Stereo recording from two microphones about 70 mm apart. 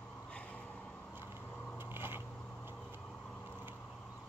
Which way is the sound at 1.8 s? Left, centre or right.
Right.